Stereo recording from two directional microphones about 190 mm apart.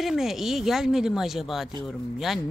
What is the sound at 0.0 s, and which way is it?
Speech, centre (ahead or behind).